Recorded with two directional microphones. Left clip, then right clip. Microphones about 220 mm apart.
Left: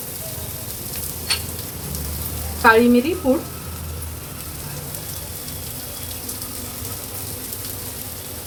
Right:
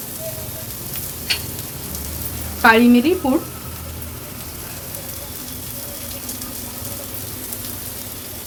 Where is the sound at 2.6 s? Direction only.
35° right (ahead or behind).